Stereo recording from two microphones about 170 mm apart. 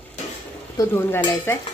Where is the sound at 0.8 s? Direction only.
15° left (ahead or behind).